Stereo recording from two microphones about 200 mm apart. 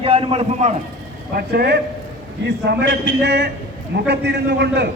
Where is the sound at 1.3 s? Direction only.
55° right (ahead or behind).